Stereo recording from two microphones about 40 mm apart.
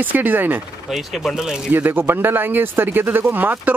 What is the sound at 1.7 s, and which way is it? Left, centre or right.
Speech, right.